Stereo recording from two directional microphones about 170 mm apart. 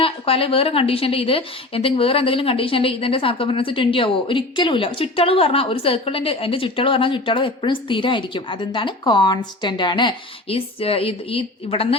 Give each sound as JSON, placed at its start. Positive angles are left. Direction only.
{"t": 0.0, "sound": "a woman's voice", "side_deg": 35}